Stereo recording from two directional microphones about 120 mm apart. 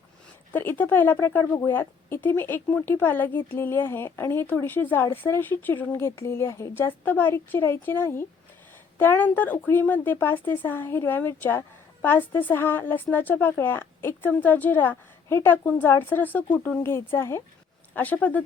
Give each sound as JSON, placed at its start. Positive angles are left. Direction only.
{"t": 0.5, "sound": "a woman's voice", "side_deg": 15}